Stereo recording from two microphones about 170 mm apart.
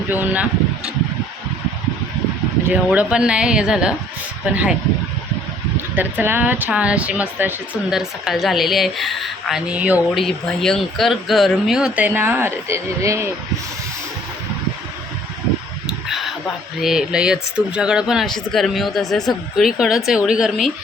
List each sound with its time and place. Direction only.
0.1 s speech: 10° right (ahead or behind)
2.6 s speech: 10° right (ahead or behind)
6.0 s speech: 10° right (ahead or behind)
10.2 s speech: 5° left (ahead or behind); by 13.2 s 15° right (ahead or behind)
15.9 s a sound: centre (ahead or behind)
16.8 s speech: 5° right (ahead or behind)